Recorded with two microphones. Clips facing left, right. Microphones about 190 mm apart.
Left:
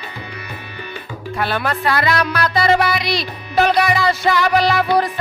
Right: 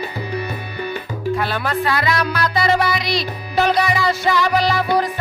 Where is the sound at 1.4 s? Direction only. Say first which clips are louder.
Even; 65° left (ahead or behind).